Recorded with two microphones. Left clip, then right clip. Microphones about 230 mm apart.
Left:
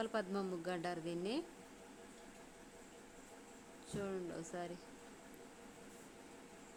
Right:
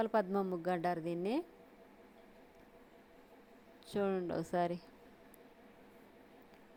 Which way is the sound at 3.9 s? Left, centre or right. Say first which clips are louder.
Right 8 dB; right.